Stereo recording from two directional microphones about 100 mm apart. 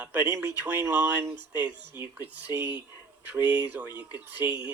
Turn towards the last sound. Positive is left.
turn(degrees=-15)  # may be behind; listen again after turning